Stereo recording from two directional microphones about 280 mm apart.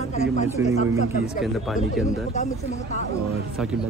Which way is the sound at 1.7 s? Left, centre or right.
Centre.